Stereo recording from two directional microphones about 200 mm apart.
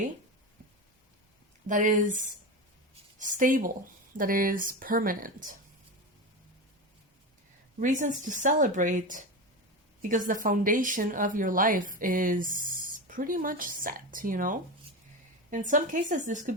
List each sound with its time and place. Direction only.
1.6 s a woman's voice: 40° right (ahead or behind)
7.8 s a woman's voice: 40° right (ahead or behind)